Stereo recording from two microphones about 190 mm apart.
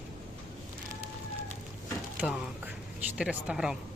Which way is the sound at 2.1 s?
5° right (ahead or behind).